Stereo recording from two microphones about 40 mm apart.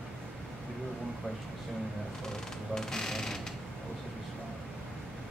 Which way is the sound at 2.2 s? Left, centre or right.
Centre.